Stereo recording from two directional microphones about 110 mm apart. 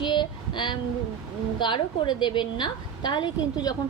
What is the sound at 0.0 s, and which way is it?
Child singing, 45° left (ahead or behind).